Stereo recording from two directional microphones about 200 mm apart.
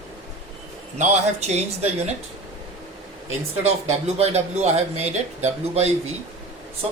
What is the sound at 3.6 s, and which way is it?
Speech, 35° right (ahead or behind).